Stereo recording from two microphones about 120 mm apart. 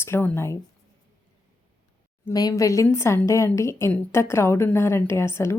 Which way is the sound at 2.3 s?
30° left (ahead or behind).